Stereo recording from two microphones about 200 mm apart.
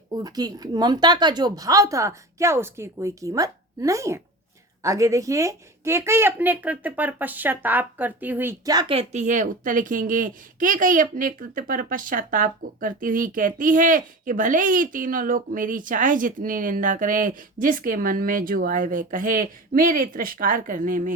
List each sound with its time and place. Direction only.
0.1 s a woman's voice: 20° right (ahead or behind); by 21.1 s 45° right (ahead or behind)